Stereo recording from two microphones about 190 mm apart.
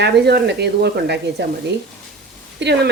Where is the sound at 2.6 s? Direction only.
65° right (ahead or behind).